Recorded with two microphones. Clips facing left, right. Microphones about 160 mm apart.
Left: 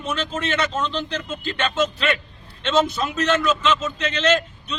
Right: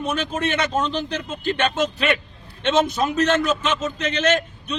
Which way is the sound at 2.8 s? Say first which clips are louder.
Right 2 dB; 45° right (ahead or behind).